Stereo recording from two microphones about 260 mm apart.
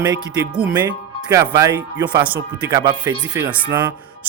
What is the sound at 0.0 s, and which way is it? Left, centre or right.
Music, centre.